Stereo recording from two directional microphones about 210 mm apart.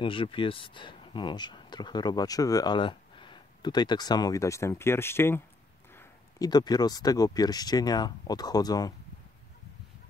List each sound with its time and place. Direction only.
0.0 s speech: 25° left (ahead or behind)